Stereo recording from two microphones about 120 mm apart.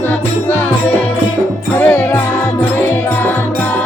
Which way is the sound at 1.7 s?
20° left (ahead or behind).